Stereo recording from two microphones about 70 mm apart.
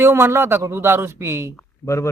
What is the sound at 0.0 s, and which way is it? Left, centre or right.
Speech, right.